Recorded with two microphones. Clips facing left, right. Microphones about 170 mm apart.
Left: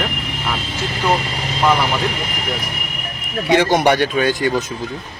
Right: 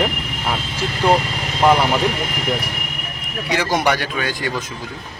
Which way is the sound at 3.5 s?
25° left (ahead or behind).